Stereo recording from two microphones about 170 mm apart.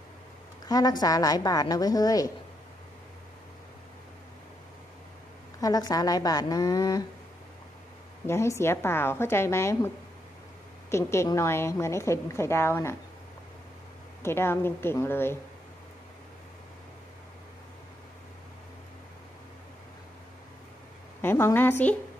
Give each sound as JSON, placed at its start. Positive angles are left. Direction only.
{"t": 0.7, "sound": "a woman's voice", "side_deg": 25}
{"t": 5.6, "sound": "a woman's voice", "side_deg": 20}
{"t": 8.3, "sound": "a woman's voice", "side_deg": 15}
{"t": 10.9, "sound": "a woman's voice", "side_deg": 15}
{"t": 14.2, "sound": "a woman's voice", "side_deg": 15}
{"t": 21.2, "sound": "a woman's voice", "side_deg": 15}